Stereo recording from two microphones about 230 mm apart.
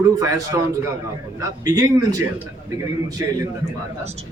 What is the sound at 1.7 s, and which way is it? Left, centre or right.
Speech, centre.